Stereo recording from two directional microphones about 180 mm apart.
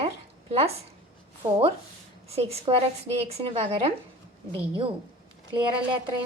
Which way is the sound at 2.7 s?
30° right (ahead or behind).